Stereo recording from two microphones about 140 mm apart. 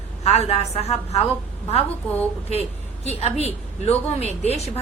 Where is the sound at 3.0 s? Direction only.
50° left (ahead or behind).